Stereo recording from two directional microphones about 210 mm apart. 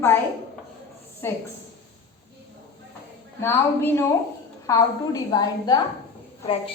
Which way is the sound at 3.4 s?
10° left (ahead or behind).